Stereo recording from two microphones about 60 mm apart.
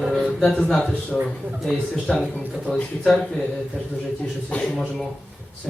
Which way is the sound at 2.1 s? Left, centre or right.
Centre.